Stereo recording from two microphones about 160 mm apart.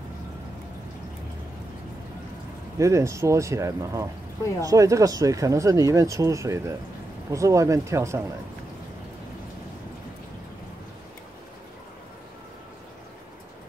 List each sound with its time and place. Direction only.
2.8 s speech: 20° right (ahead or behind)